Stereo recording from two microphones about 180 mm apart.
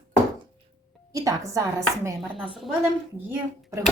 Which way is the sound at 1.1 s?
20° right (ahead or behind).